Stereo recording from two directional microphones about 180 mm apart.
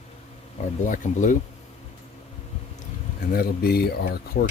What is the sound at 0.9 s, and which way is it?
Speech, 45° left (ahead or behind).